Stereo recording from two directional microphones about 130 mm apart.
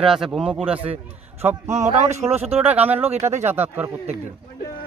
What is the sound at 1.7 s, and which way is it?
Speech, 65° right (ahead or behind).